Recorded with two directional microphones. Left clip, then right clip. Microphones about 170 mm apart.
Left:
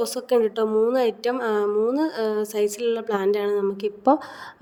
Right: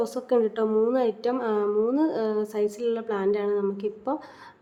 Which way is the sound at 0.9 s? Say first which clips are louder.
Left 3 dB; 40° left (ahead or behind).